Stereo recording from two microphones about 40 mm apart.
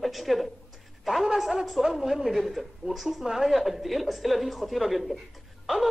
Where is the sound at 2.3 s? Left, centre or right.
Centre.